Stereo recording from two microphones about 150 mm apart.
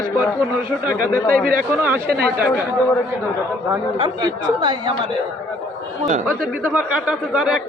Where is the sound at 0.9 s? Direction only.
65° right (ahead or behind).